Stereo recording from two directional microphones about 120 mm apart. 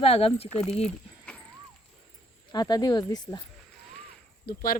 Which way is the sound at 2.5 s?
35° left (ahead or behind).